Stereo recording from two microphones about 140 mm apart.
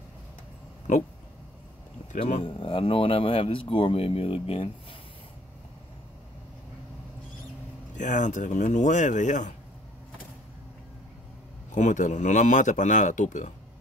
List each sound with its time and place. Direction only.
0.9 s a man's voice: 60° left (ahead or behind)
2.4 s a man's voice: 40° left (ahead or behind)
7.9 s a man's voice: 65° left (ahead or behind)
11.7 s a man's voice: 60° left (ahead or behind)